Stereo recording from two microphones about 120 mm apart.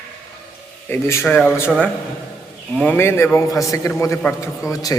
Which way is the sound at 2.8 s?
15° left (ahead or behind).